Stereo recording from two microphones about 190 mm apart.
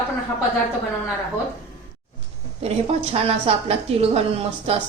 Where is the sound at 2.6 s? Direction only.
30° right (ahead or behind).